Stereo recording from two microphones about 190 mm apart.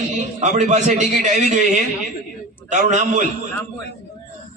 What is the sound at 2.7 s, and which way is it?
Speech, 40° right (ahead or behind).